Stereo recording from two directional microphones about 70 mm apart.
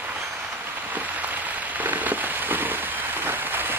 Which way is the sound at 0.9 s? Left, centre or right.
Right.